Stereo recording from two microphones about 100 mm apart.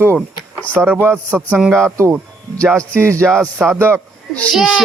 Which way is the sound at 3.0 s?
30° right (ahead or behind).